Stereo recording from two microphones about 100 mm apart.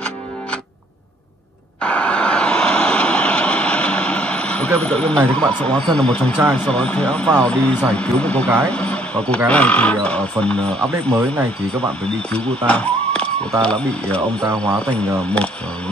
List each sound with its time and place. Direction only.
1.8 s vehicle: 10° left (ahead or behind)
5.6 s speech: 10° left (ahead or behind)
11.1 s speech: 25° right (ahead or behind)
12.3 s speech: 10° left (ahead or behind)